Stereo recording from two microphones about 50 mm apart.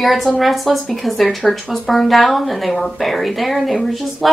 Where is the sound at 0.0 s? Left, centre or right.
Centre.